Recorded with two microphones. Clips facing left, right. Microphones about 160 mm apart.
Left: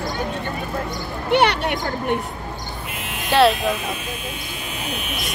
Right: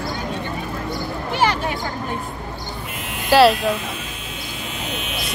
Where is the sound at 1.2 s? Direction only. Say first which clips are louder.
Left 4 dB; 70° left (ahead or behind).